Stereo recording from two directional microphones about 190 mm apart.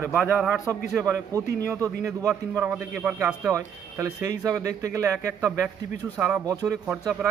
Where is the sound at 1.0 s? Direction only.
15° right (ahead or behind).